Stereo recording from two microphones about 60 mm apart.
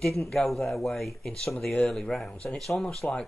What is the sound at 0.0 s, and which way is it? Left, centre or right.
Speech, centre.